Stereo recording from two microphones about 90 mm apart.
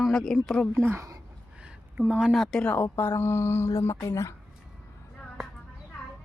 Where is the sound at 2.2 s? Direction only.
Centre (ahead or behind).